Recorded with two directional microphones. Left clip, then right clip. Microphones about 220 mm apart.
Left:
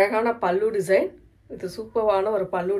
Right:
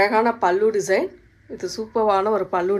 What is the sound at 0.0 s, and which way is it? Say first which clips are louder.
Speech: right 3 dB; 30° right (ahead or behind).